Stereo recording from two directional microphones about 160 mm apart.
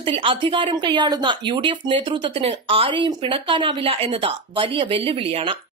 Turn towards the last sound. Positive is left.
turn(degrees=-35)  # may be behind; listen again after turning